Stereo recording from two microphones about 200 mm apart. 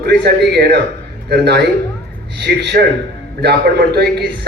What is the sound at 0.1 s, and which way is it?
A man's voice, 55° right (ahead or behind).